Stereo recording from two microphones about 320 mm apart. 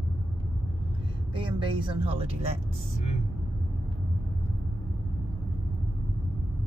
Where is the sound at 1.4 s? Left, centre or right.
Centre.